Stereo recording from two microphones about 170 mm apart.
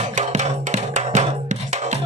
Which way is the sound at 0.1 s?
45° right (ahead or behind).